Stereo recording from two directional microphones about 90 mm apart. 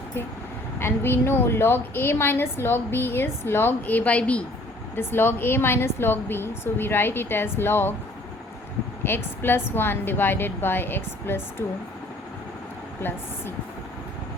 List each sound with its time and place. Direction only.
0.8 s a woman's voice: 25° left (ahead or behind)
4.9 s a woman's voice: 25° left (ahead or behind)
9.0 s a woman's voice: 25° left (ahead or behind)
13.0 s a woman's voice: 25° left (ahead or behind)